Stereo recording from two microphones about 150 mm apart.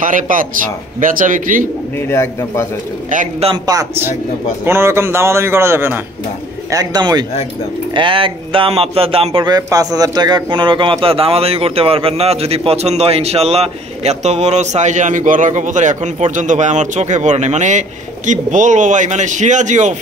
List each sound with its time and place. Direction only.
0.0 s speech: 65° right (ahead or behind)
2.0 s a man's voice: 20° left (ahead or behind)
3.1 s speech: 60° right (ahead or behind)
3.6 s a man's voice: 20° right (ahead or behind); by 20.0 s 55° right (ahead or behind)